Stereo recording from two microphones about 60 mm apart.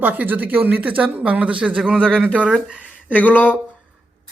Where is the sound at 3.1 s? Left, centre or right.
Left.